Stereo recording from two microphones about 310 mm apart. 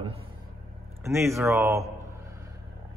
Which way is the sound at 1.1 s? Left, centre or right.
Centre.